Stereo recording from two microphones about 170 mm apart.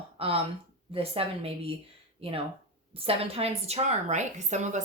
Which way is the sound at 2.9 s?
35° right (ahead or behind).